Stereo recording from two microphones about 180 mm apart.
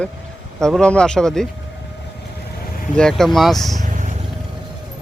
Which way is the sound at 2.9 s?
5° left (ahead or behind).